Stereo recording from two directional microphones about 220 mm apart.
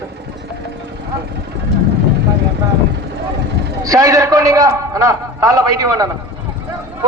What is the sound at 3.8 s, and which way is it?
A man's voice, 15° right (ahead or behind).